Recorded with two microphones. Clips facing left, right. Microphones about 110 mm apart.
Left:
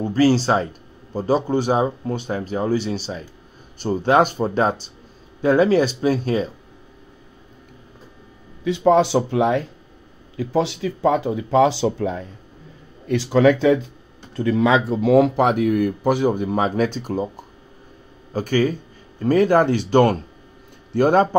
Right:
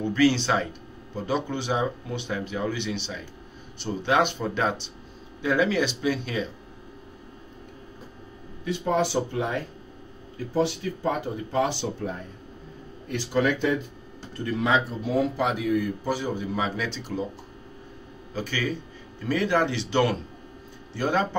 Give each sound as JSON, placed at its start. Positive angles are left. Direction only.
{"t": 0.0, "sound": "speech", "side_deg": 35}
{"t": 8.6, "sound": "speech", "side_deg": 90}
{"t": 14.9, "sound": "speech", "side_deg": 90}